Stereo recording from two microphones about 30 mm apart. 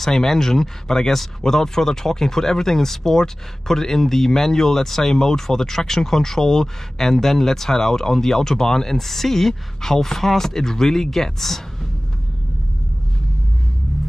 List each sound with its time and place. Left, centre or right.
0.0 s speech: centre